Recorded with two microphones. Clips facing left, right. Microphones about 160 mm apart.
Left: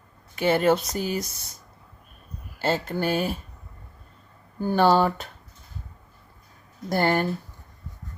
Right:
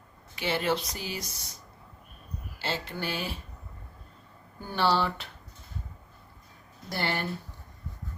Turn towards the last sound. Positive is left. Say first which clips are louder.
# left 9 dB
turn(degrees=45)  # may be behind; listen again after turning